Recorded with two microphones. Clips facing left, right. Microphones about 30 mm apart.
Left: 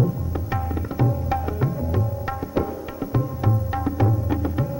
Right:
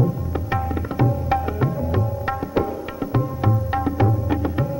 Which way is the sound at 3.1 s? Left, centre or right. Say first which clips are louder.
Right 2 dB; right.